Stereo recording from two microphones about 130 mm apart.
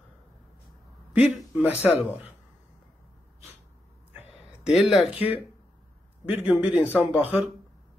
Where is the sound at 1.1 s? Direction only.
5° right (ahead or behind).